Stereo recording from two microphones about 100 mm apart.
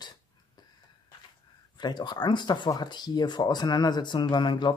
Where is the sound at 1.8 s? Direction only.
50° left (ahead or behind).